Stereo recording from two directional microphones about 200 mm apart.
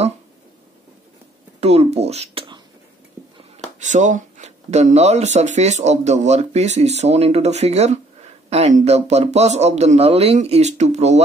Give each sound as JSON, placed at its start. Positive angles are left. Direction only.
{"t": 1.6, "sound": "speech", "side_deg": -30}
{"t": 3.8, "sound": "speech", "side_deg": -40}